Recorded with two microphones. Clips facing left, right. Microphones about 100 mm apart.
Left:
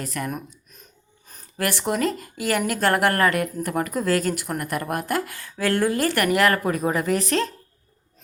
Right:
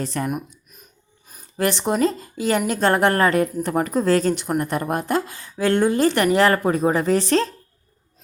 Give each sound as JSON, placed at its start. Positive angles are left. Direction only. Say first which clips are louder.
{"t": 0.0, "sound": "speech", "louder": "right 4 dB", "side_deg": -30}
{"t": 0.3, "sound": "a sound", "louder": "right 4 dB", "side_deg": -10}
{"t": 1.5, "sound": "speech", "louder": "right 4 dB", "side_deg": -20}